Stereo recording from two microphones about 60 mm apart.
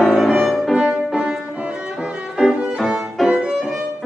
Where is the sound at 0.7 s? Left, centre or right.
Centre.